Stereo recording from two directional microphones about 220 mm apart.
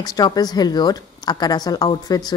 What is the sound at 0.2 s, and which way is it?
Speech, 20° left (ahead or behind).